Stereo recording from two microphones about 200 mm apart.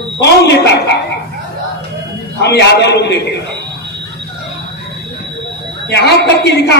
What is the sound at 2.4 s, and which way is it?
A man's voice, 55° left (ahead or behind).